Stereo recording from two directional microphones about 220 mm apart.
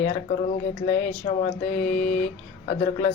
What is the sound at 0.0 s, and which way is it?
Speech, 30° left (ahead or behind).